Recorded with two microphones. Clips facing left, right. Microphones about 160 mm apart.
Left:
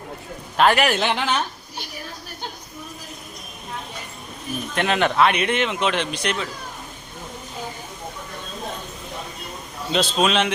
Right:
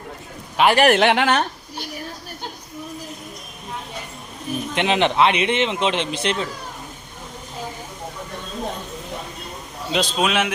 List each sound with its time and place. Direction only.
0.5 s a man's voice: 10° right (ahead or behind)
0.9 s a woman's voice: 70° right (ahead or behind)
4.7 s a man's voice: 20° right (ahead or behind)
9.9 s a man's voice: 15° right (ahead or behind)